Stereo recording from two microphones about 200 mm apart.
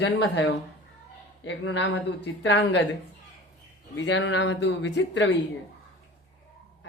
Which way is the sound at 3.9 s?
65° left (ahead or behind).